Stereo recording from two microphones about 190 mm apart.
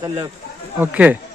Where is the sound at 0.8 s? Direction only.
5° right (ahead or behind).